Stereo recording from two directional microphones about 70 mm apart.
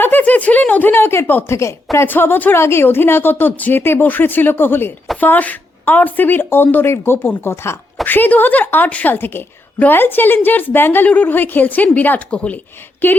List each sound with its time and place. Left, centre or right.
0.0 s chuckle: left
1.5 s speech: left
2.0 s a woman's voice: left
8.0 s a woman's voice: left